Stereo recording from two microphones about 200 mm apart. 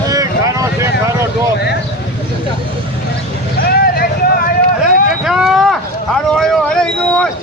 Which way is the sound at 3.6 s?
50° left (ahead or behind).